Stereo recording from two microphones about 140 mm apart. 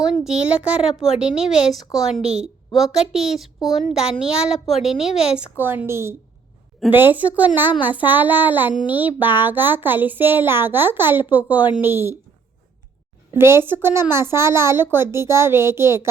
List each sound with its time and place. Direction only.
0.0 s a child's voice: 5° right (ahead or behind)
13.3 s a woman's voice: 15° right (ahead or behind)